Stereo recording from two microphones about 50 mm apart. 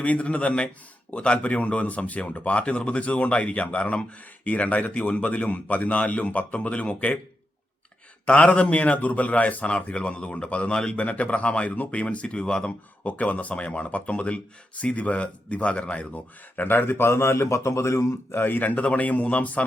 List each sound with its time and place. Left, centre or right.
0.0 s speech: left
8.3 s speech: left
13.1 s speech: left
16.6 s a man's voice: left
18.3 s a man's voice: left